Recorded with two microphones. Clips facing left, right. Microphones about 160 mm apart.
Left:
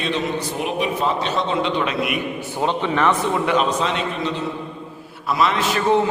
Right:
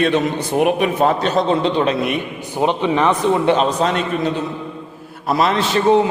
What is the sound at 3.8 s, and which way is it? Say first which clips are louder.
A man's voice: right 5 dB; 50° right (ahead or behind).